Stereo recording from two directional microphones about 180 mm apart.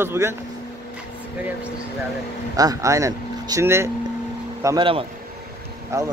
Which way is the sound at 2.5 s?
20° right (ahead or behind).